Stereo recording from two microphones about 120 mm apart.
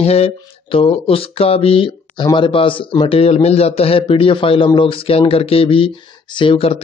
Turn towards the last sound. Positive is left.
turn(degrees=50)  # may be behind; listen again after turning